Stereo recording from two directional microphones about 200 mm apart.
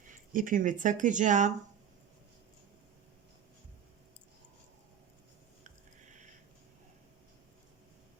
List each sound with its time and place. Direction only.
0.1 s speech: 40° right (ahead or behind)